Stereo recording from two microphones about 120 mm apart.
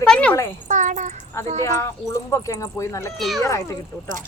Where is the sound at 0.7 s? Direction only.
90° right.